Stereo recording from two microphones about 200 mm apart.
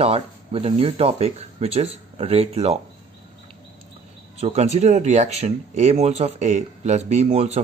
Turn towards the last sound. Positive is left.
turn(degrees=-35)  # may be behind; listen again after turning